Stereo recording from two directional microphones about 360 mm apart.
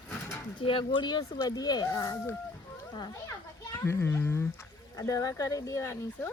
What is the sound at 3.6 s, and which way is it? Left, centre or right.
Speech, centre.